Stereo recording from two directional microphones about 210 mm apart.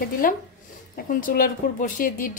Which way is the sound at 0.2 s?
40° left (ahead or behind).